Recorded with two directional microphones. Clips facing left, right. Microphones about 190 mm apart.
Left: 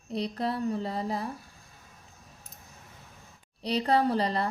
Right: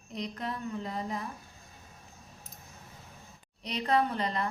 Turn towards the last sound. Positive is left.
turn(degrees=35)  # may be behind; listen again after turning